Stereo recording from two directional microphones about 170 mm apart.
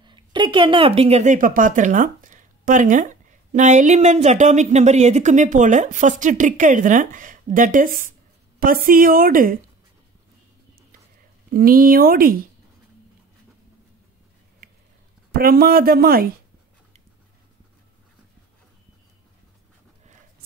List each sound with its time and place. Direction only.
0.0 s speech: 25° right (ahead or behind); by 9.6 s 55° right (ahead or behind)
11.5 s speech: 55° right (ahead or behind)
15.3 s speech: 60° right (ahead or behind)